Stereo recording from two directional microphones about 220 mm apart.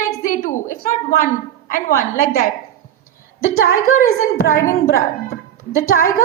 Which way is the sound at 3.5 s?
40° left (ahead or behind).